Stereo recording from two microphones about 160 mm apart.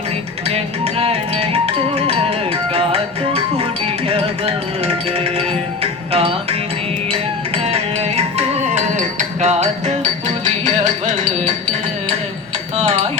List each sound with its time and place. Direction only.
0.4 s music: 35° right (ahead or behind)
12.7 s dishes: 45° right (ahead or behind)